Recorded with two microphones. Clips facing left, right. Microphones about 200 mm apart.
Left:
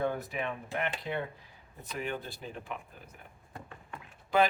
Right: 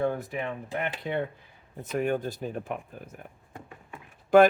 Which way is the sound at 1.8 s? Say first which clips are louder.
Right 9 dB; 45° right (ahead or behind).